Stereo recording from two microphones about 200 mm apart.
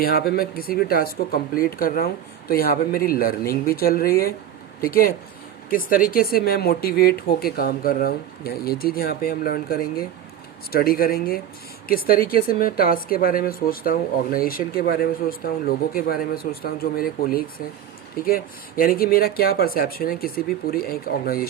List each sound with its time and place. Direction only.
0.0 s speech: 50° left (ahead or behind)
18.3 s speech: 45° left (ahead or behind)